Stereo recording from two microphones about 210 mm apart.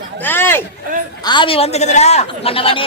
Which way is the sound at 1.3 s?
25° left (ahead or behind).